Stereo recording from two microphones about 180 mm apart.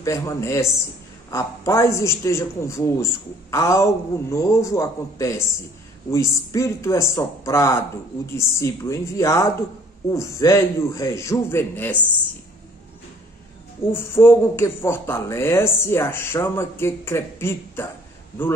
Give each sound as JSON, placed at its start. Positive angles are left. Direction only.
{"t": 0.0, "sound": "a man's voice", "side_deg": 20}
{"t": 13.9, "sound": "a man's voice", "side_deg": 15}